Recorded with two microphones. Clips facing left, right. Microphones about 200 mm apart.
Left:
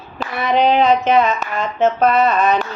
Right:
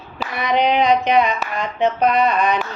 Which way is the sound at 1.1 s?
15° right (ahead or behind).